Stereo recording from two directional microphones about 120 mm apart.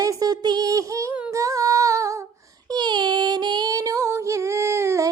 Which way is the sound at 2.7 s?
40° right (ahead or behind).